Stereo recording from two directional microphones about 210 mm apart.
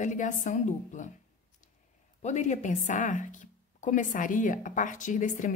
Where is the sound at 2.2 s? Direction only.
35° left (ahead or behind).